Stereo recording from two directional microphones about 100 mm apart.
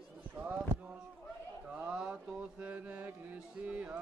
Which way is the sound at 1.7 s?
10° right (ahead or behind).